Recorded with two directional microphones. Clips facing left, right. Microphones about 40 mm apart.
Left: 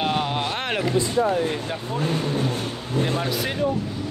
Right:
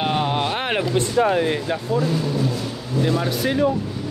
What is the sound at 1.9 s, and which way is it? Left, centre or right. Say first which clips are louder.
Speech: right 2 dB; left.